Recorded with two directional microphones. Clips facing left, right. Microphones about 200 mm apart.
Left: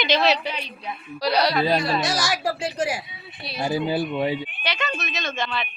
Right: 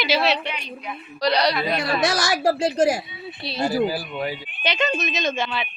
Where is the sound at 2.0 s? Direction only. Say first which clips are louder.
Right 4 dB; 55° right (ahead or behind).